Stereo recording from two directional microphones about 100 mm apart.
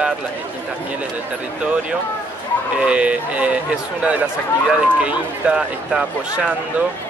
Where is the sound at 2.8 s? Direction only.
10° right (ahead or behind).